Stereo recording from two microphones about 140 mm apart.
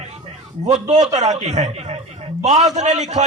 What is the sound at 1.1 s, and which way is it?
A man's voice, 55° right (ahead or behind).